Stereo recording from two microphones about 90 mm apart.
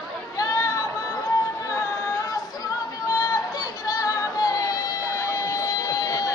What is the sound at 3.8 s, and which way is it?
Music, 45° left (ahead or behind).